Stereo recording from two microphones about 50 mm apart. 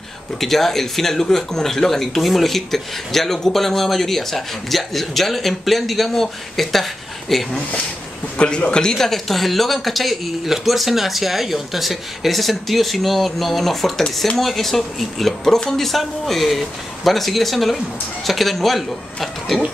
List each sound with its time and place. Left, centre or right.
0.4 s speech: centre
8.4 s speech: left; by 19.6 s centre